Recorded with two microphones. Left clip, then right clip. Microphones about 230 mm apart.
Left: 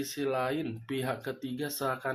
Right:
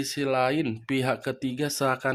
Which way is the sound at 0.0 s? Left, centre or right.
Right.